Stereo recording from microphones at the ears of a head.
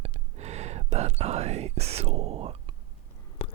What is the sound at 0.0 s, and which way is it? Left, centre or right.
Whispering, right.